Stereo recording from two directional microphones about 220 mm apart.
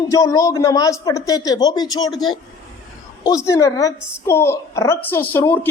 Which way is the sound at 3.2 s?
15° left (ahead or behind).